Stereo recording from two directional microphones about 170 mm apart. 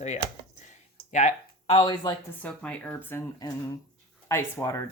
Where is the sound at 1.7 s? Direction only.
30° left (ahead or behind).